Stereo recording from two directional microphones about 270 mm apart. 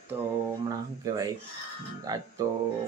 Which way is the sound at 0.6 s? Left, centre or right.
Centre.